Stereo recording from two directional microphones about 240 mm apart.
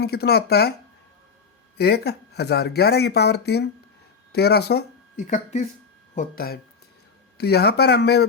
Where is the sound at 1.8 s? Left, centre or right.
Left.